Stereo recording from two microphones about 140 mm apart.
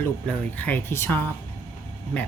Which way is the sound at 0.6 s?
15° left (ahead or behind).